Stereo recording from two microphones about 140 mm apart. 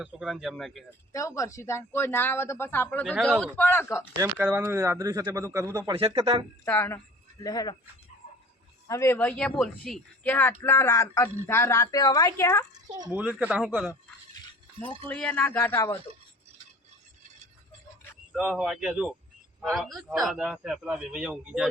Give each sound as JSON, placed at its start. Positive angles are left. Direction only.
{"t": 0.0, "sound": "a man's voice", "side_deg": -5}
{"t": 1.1, "sound": "a woman's voice", "side_deg": 20}
{"t": 4.5, "sound": "speech", "side_deg": -20}
{"t": 6.0, "sound": "speech", "side_deg": -40}
{"t": 6.7, "sound": "a woman's voice", "side_deg": 15}
{"t": 7.4, "sound": "speech", "side_deg": 25}
{"t": 8.9, "sound": "a woman's voice", "side_deg": 20}
{"t": 10.2, "sound": "speech", "side_deg": 15}
{"t": 13.1, "sound": "a man's voice", "side_deg": -10}
{"t": 15.0, "sound": "a woman's voice", "side_deg": 10}
{"t": 18.3, "sound": "a man's voice", "side_deg": -5}